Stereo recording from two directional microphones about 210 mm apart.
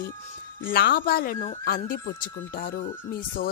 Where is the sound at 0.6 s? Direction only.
45° left (ahead or behind).